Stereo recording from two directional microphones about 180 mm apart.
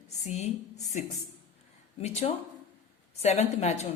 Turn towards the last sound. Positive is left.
turn(degrees=40)  # may be behind; listen again after turning